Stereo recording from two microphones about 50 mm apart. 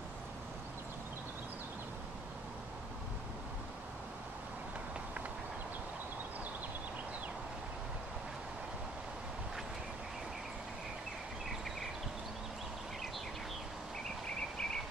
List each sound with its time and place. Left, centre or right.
14.2 s vehicle: centre